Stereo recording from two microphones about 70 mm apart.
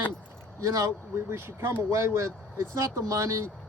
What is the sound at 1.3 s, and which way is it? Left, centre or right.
Speech, right.